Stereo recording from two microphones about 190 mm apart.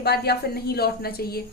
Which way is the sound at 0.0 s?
55° left (ahead or behind).